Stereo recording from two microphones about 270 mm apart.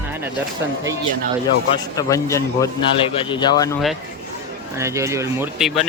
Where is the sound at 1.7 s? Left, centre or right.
Centre.